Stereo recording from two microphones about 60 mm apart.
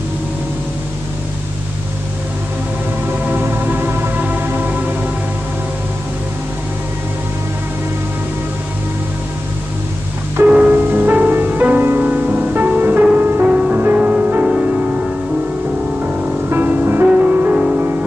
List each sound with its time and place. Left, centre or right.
3.1 s music: right
10.4 s music: right
12.1 s music: right
13.5 s music: centre
16.4 s music: right